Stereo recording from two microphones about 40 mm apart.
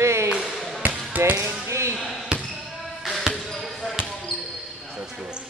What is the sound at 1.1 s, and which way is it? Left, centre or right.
Speech, right.